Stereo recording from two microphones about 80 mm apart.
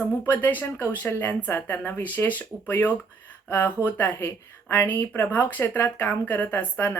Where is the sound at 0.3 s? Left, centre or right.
Left.